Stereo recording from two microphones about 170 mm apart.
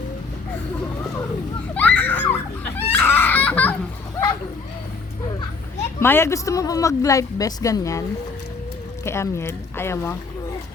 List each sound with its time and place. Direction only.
1.7 s children playing: 10° left (ahead or behind)
2.9 s a sound: 10° left (ahead or behind)
6.0 s speech: 15° left (ahead or behind)
9.0 s speech: 15° left (ahead or behind)